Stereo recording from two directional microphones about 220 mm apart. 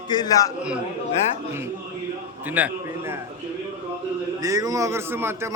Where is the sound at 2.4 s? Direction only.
10° right (ahead or behind).